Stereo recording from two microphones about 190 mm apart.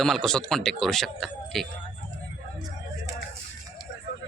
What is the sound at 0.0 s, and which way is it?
Speech, centre (ahead or behind).